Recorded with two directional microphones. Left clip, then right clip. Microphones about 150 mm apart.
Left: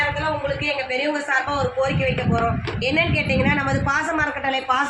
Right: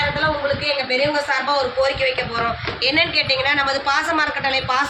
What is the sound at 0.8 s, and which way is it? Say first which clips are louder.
Speech: right 4 dB; 35° left (ahead or behind).